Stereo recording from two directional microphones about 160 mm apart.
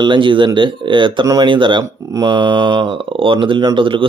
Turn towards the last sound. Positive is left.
turn(degrees=-30)  # may be behind; listen again after turning